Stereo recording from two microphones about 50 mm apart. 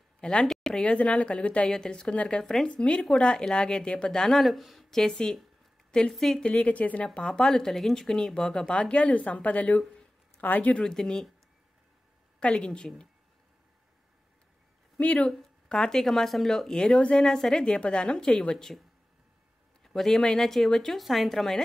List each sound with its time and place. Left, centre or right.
0.2 s a woman's voice: centre
4.4 s speech: centre
4.9 s speech: centre
5.9 s a sound: centre
6.1 s speech: centre
6.4 s a woman's voice: left
7.2 s speech: centre; by 10.8 s left
10.8 s speech: centre
12.4 s speech: centre
15.0 s speech: left
15.7 s a woman's voice: centre
19.8 s speech: centre